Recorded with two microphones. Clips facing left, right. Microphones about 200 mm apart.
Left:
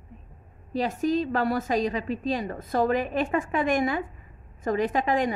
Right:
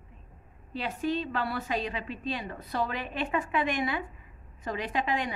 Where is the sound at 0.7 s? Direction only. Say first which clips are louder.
Left 6 dB; 40° left (ahead or behind).